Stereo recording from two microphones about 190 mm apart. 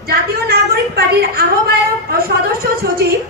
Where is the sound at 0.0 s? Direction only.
55° right (ahead or behind).